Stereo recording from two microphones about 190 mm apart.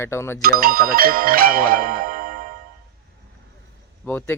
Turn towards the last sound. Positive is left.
turn(degrees=10)  # may be behind; listen again after turning